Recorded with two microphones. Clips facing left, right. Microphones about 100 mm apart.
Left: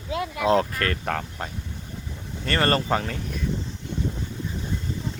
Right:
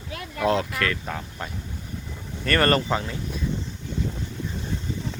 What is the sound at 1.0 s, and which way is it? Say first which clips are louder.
Speech: left 5 dB; 75° left (ahead or behind).